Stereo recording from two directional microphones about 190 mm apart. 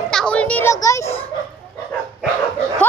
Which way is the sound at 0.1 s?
5° left (ahead or behind).